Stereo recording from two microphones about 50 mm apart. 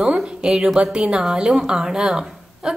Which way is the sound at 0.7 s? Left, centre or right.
Right.